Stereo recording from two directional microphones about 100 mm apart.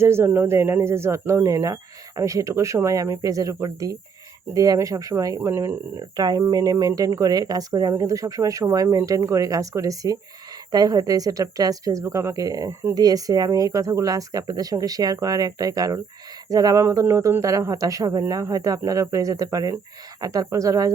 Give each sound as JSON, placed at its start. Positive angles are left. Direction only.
{"t": 0.0, "sound": "speech", "side_deg": -25}
{"t": 6.1, "sound": "speech", "side_deg": -40}